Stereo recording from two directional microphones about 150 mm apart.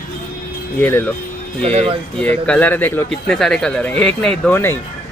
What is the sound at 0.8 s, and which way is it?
Speech, 15° left (ahead or behind).